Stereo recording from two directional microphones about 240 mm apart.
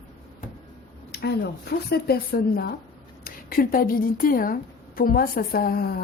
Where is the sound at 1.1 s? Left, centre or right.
Left.